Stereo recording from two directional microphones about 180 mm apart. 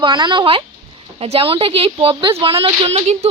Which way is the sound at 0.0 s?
25° right (ahead or behind).